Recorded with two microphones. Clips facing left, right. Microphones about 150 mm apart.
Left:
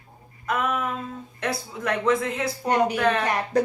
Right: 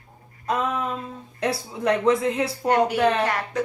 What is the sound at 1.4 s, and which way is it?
Speech, 30° right (ahead or behind).